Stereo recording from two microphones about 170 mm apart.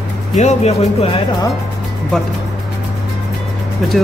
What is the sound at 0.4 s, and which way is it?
Speech, 40° left (ahead or behind).